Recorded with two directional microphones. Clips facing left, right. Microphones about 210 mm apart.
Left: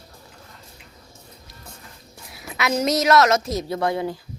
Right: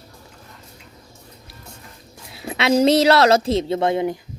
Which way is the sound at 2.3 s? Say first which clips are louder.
Right 6 dB; 25° right (ahead or behind).